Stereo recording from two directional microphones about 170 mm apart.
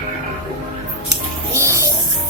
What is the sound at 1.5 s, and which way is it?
Music, 15° right (ahead or behind).